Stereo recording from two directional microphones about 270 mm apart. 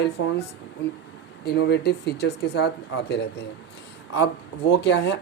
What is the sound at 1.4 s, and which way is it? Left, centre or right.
Speech, left.